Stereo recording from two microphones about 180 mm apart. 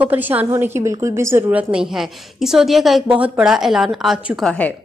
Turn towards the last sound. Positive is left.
turn(degrees=0)  # may be behind; listen again after turning